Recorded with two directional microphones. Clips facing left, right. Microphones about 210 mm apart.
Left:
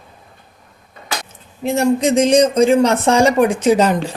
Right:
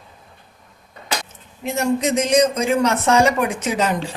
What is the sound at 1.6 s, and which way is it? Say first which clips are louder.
Speech: left 5 dB; 30° left (ahead or behind).